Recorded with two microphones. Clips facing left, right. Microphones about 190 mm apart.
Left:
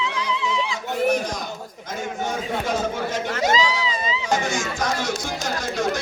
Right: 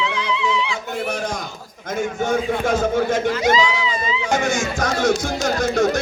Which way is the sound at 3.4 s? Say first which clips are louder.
Right 3 dB; 40° left (ahead or behind).